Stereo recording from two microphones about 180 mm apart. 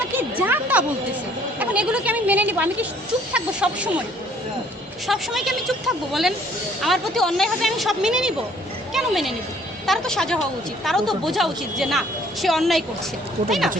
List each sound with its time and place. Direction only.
0.2 s a sound: 10° right (ahead or behind)
1.5 s a woman's voice: 5° right (ahead or behind)
5.0 s a woman's voice: centre (ahead or behind)